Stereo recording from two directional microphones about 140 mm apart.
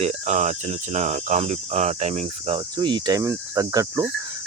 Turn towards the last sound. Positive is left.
turn(degrees=-25)  # may be behind; listen again after turning